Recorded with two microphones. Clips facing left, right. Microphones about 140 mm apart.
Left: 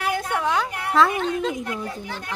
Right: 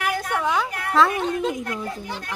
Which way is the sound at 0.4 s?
5° right (ahead or behind).